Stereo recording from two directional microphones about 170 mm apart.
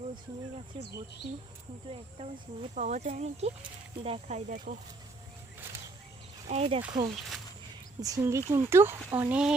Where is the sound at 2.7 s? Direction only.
45° right (ahead or behind).